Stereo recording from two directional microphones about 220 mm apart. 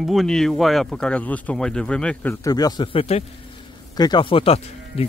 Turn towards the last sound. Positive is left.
turn(degrees=25)  # may be behind; listen again after turning